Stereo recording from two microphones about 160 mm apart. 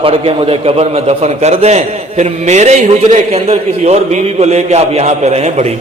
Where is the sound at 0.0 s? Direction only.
35° right (ahead or behind).